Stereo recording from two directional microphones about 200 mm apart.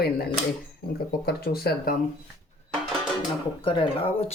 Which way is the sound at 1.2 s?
50° left (ahead or behind).